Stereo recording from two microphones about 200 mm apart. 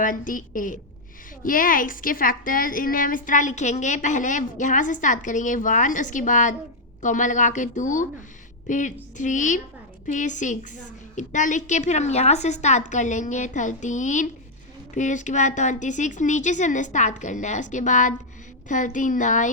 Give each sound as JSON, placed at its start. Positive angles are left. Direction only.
{"t": 0.0, "sound": "a woman's voice", "side_deg": 40}